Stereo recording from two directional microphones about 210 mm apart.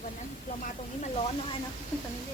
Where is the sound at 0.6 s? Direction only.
35° left (ahead or behind).